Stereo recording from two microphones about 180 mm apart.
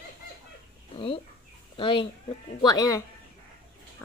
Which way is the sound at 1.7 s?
30° left (ahead or behind).